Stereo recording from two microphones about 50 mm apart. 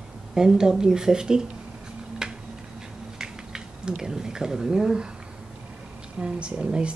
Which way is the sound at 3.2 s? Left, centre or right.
Centre.